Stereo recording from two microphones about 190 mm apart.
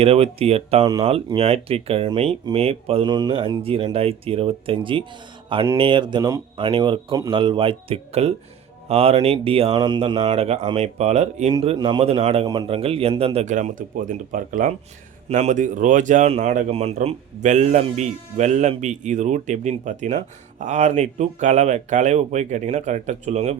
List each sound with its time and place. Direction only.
0.0 s speech: 30° right (ahead or behind)
12.5 s speech: 20° right (ahead or behind)
12.7 s speech: 30° right (ahead or behind)